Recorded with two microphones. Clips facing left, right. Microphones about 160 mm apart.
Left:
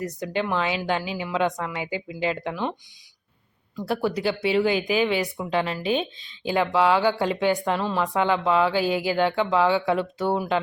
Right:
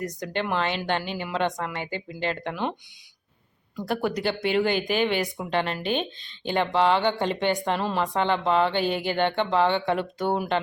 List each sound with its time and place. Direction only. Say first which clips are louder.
0.0 s speech: left 2 dB; 5° left (ahead or behind)
3.8 s speech: left 1 dB; 5° left (ahead or behind)